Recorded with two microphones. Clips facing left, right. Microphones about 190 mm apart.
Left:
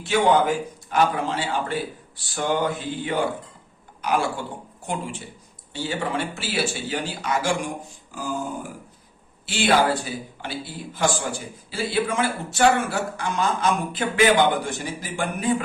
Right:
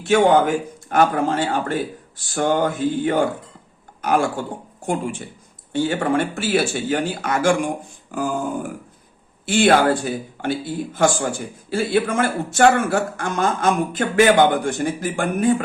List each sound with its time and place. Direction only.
0.0 s a man's voice: 50° right (ahead or behind)
5.7 s a man's voice: 50° right (ahead or behind)
8.1 s a sound: 55° right (ahead or behind)
9.5 s a man's voice: 55° right (ahead or behind)